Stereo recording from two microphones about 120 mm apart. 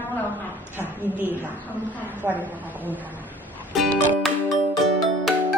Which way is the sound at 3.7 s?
Centre (ahead or behind).